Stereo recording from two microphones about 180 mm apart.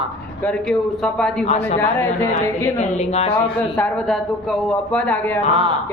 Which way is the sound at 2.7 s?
40° left (ahead or behind).